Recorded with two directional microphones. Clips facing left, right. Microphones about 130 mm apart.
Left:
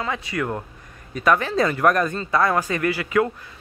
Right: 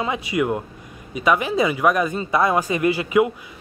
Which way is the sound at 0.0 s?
15° right (ahead or behind).